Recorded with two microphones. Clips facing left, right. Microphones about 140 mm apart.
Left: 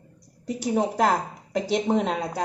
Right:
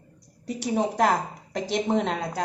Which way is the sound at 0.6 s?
5° left (ahead or behind).